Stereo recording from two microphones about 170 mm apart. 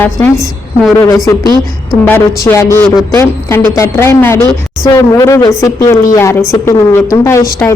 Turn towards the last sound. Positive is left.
turn(degrees=15)  # may be behind; listen again after turning